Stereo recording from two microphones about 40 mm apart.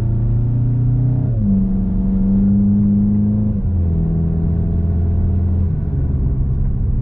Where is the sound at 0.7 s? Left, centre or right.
Centre.